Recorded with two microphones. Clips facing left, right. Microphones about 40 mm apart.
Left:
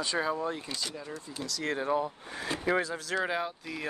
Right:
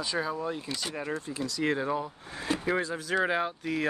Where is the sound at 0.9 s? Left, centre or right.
Right.